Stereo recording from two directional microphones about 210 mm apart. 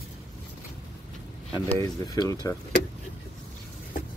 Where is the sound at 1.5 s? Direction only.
20° left (ahead or behind).